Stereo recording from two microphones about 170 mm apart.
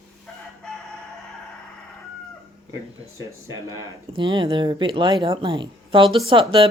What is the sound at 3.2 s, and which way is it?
Speech, 20° right (ahead or behind).